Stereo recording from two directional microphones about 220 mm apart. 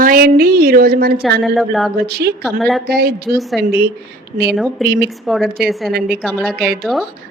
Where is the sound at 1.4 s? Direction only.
Centre (ahead or behind).